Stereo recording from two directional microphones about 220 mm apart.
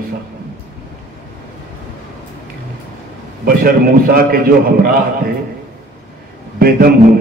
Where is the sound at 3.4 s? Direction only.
40° right (ahead or behind).